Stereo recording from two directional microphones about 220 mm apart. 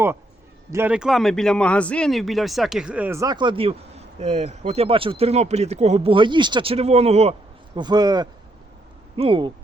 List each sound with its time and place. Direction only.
0.7 s speech: 10° right (ahead or behind); by 9.5 s 25° right (ahead or behind)